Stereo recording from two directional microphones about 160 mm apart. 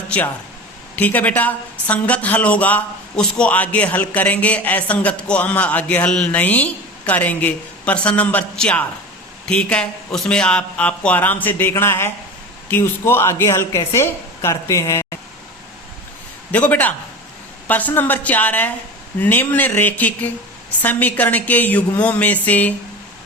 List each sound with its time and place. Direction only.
0.9 s a woman's voice: 10° left (ahead or behind)
16.5 s a woman's voice: 10° left (ahead or behind)